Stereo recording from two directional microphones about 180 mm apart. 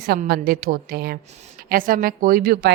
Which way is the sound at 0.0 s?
60° right (ahead or behind).